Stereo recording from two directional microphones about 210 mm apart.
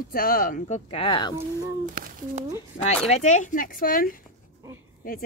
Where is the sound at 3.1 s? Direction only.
35° left (ahead or behind).